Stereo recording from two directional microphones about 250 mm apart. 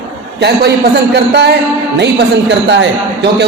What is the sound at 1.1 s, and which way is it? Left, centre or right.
A man's voice, right.